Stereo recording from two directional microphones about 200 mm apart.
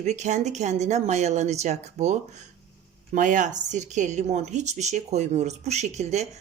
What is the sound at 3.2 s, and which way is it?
Speech, 40° right (ahead or behind).